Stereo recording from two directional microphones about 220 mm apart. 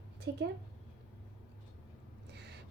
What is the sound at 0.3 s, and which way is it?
Speech, 50° right (ahead or behind).